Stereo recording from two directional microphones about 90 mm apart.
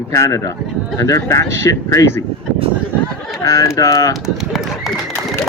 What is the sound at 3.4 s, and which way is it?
Speech, 40° left (ahead or behind).